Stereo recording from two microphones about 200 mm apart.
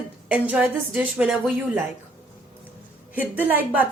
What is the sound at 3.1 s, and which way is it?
Speech, 10° right (ahead or behind).